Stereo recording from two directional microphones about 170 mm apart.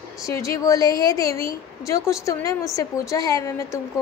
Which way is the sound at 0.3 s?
20° left (ahead or behind).